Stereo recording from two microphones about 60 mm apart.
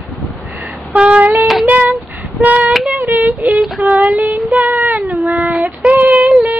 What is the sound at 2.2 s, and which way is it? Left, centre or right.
Child singing, right.